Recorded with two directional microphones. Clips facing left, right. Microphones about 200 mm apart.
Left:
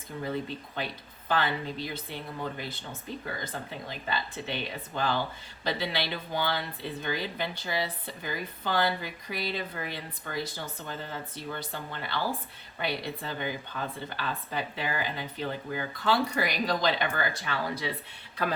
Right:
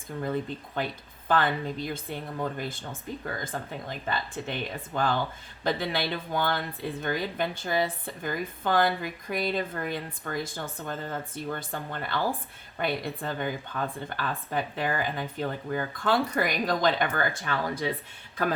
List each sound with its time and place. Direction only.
0.1 s speech: 50° right (ahead or behind)
1.3 s speech: 50° right (ahead or behind)
5.6 s speech: 50° right (ahead or behind)